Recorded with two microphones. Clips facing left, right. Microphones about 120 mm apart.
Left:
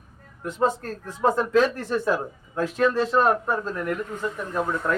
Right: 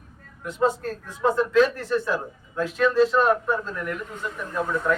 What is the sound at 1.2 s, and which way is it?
Speech, 40° left (ahead or behind).